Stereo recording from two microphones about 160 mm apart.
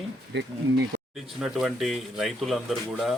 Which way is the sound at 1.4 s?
5° right (ahead or behind).